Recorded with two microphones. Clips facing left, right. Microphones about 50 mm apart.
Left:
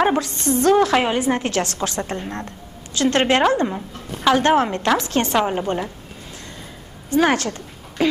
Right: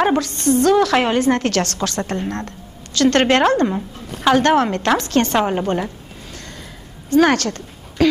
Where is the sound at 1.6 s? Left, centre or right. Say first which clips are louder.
Right 2 dB; right.